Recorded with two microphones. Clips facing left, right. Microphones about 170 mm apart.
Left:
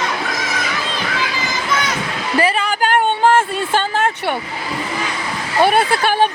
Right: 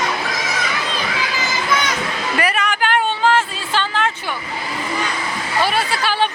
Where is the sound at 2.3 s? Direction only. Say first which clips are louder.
Left 4 dB; 30° left (ahead or behind).